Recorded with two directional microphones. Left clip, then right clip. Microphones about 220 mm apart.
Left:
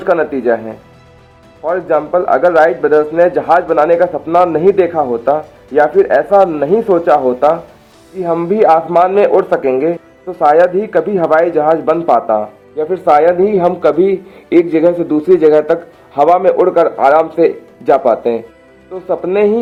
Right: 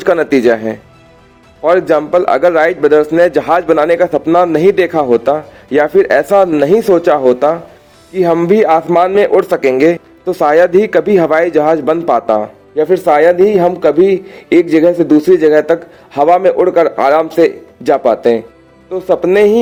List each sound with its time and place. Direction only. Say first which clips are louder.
0.0 s speech: right 3 dB; 55° right (ahead or behind)
1.6 s a man's voice: right 4 dB; 50° right (ahead or behind)
12.7 s a man's voice: right 1 dB; 30° right (ahead or behind)